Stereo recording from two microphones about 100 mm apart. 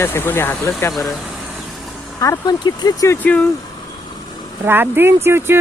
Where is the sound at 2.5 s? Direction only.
45° left (ahead or behind).